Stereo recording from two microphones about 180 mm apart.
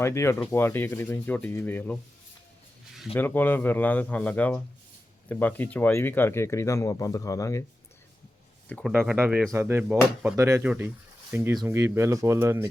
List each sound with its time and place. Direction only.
0.0 s speech: 15° left (ahead or behind)
3.2 s speech: 10° left (ahead or behind)
8.9 s speech: 10° right (ahead or behind)